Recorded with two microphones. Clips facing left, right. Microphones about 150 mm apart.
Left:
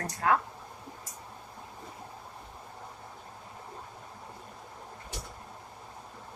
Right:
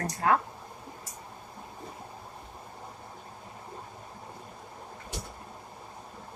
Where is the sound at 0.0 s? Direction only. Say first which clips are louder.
Right 1 dB; 35° right (ahead or behind).